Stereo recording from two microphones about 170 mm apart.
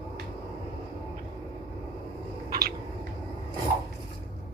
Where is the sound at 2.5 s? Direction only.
60° right (ahead or behind).